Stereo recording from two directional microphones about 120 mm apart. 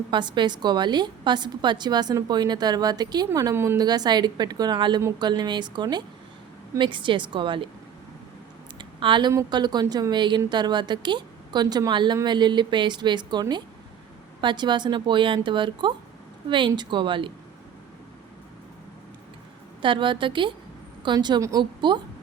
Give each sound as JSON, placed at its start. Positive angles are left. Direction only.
{"t": 0.1, "sound": "a woman's voice", "side_deg": -40}
{"t": 3.8, "sound": "a woman's voice", "side_deg": -35}
{"t": 8.8, "sound": "a sound", "side_deg": -40}
{"t": 9.5, "sound": "a woman's voice", "side_deg": -35}
{"t": 19.8, "sound": "a woman's voice", "side_deg": -45}